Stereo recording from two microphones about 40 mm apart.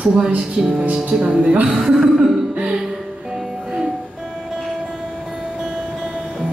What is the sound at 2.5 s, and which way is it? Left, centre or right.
Music, right.